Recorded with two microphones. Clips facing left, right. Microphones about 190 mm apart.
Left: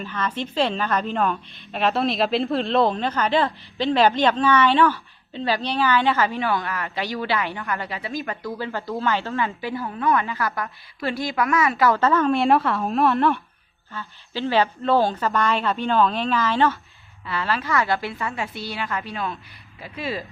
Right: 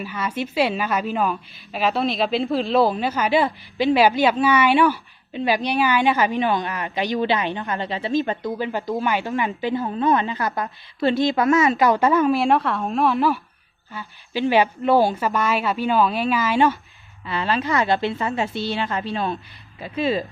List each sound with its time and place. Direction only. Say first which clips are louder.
0.0 s a woman's voice: right 1 dB; 10° right (ahead or behind)
13.9 s a woman's voice: right 3 dB; 15° right (ahead or behind)